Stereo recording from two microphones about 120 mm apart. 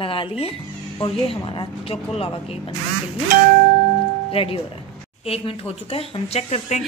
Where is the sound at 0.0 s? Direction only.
45° left (ahead or behind).